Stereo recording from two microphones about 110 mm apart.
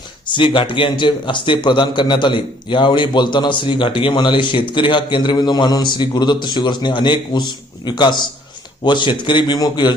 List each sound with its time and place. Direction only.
0.3 s a man's voice: 45° left (ahead or behind)